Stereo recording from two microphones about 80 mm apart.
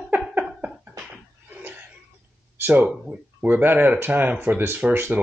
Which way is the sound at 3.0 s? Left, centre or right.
Centre.